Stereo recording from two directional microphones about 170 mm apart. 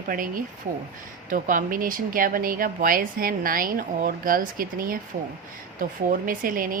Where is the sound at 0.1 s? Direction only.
55° right (ahead or behind).